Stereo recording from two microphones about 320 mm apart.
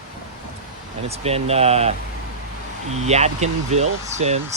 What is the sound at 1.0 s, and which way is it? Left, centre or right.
Speech, centre.